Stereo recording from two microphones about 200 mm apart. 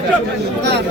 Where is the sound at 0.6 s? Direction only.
55° right (ahead or behind).